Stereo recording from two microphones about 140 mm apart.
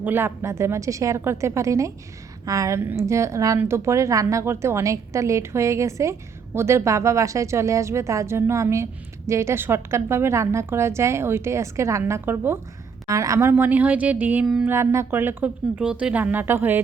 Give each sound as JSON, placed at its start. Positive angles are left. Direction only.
{"t": 0.0, "sound": "a woman's voice", "side_deg": -15}
{"t": 14.7, "sound": "speech", "side_deg": -20}